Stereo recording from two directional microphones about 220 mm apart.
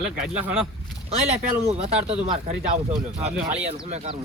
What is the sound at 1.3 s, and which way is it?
Speech, 30° right (ahead or behind).